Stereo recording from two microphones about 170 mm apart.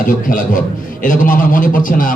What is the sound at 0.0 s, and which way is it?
A man's voice, 55° left (ahead or behind).